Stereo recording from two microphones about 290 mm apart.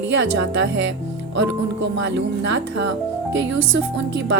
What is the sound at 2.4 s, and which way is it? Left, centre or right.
A woman's voice, right.